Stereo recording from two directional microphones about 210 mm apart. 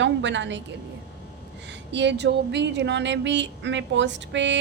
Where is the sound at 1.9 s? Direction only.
55° right (ahead or behind).